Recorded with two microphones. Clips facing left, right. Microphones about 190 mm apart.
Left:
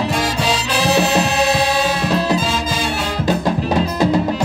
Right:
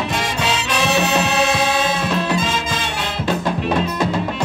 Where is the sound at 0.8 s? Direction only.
35° left (ahead or behind).